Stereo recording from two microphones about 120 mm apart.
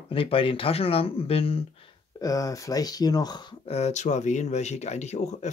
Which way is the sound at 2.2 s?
30° left (ahead or behind).